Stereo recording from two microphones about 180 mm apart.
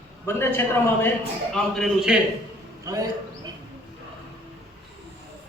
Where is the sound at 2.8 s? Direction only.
20° right (ahead or behind).